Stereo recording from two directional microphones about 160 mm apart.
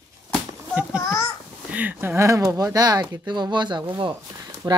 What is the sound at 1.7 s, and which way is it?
Speech, 10° right (ahead or behind).